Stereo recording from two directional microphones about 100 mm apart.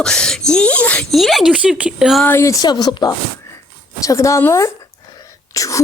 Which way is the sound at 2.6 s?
45° left (ahead or behind).